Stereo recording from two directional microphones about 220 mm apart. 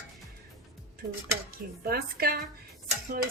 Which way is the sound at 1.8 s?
45° right (ahead or behind).